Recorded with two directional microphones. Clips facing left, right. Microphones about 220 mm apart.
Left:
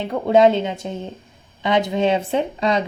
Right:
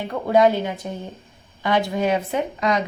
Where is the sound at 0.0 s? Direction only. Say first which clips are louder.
Left 3 dB; 25° left (ahead or behind).